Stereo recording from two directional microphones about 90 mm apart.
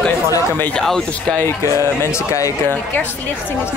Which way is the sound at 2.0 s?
35° left (ahead or behind).